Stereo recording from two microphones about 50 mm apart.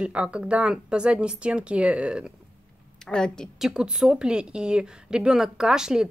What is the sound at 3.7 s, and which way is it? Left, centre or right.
A woman's voice, centre.